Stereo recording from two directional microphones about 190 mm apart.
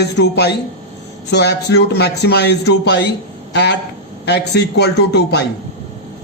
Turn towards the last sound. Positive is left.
turn(degrees=60)  # may be behind; listen again after turning